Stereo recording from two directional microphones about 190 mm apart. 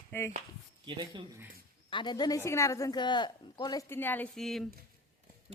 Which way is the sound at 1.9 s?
25° left (ahead or behind).